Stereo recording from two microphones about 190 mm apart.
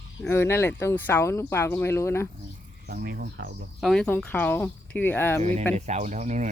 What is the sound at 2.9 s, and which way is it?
Speech, 55° right (ahead or behind).